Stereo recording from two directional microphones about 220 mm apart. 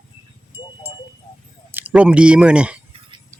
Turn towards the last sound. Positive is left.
turn(degrees=-20)  # may be behind; listen again after turning